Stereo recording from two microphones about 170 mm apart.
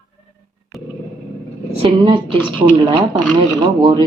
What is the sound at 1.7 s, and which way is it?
Speech, 35° right (ahead or behind).